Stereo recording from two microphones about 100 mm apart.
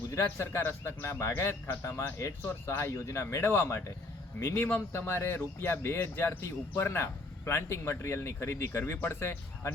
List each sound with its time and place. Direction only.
0.1 s speech: 30° left (ahead or behind)